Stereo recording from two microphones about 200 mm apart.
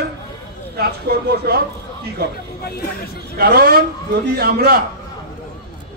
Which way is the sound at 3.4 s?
50° right (ahead or behind).